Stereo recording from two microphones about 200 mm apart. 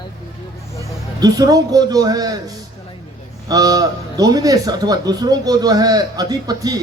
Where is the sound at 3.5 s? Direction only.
20° right (ahead or behind).